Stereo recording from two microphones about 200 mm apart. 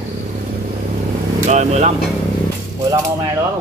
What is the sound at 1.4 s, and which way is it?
Speech, 35° right (ahead or behind).